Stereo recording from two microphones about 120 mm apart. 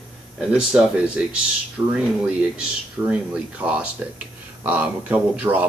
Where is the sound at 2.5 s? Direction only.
5° right (ahead or behind).